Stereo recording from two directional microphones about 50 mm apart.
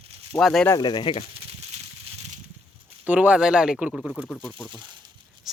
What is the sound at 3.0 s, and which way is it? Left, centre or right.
Speech, right.